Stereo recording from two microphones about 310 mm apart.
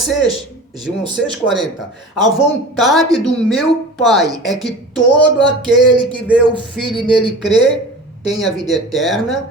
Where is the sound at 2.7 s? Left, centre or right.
Centre.